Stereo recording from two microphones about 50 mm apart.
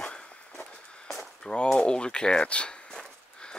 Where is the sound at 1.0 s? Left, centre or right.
Centre.